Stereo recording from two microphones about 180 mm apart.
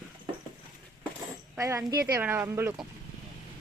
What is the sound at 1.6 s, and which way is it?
Speech, 15° right (ahead or behind).